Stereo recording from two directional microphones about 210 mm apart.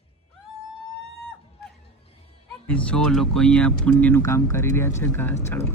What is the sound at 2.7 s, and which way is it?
Speech, 5° left (ahead or behind).